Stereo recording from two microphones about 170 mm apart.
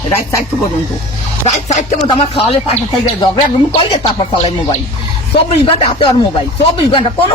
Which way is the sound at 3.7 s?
35° left (ahead or behind).